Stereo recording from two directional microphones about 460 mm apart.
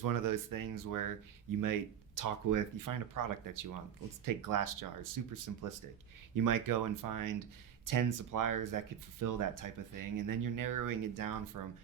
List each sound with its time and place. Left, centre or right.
0.0 s speech: right